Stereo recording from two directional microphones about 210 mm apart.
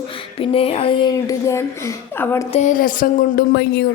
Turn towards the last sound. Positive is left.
turn(degrees=50)  # may be behind; listen again after turning